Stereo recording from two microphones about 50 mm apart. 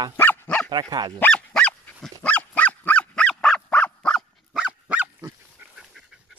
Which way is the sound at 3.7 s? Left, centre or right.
Left.